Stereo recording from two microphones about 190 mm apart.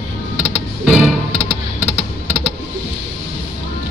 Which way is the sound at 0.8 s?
Centre (ahead or behind).